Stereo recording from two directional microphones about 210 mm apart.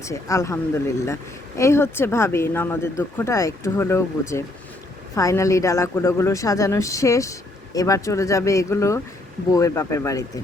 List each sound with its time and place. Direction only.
0.0 s speech: 15° left (ahead or behind)